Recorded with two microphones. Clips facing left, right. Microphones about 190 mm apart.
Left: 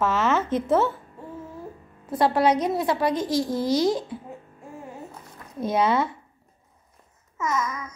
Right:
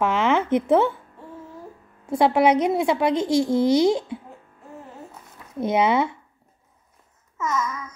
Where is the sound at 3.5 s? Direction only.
25° right (ahead or behind).